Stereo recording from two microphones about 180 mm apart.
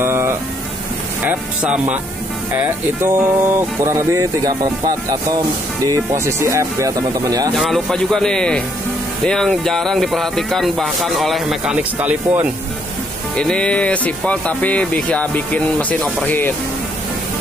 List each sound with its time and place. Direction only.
0.0 s a sound: 15° right (ahead or behind)
1.2 s speech: 10° right (ahead or behind)
5.9 s speech: 15° right (ahead or behind)
7.5 s speech: centre (ahead or behind)
13.4 s speech: 5° left (ahead or behind)